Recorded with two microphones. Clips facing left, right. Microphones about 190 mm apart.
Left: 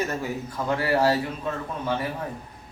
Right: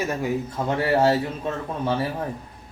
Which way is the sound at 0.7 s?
25° right (ahead or behind).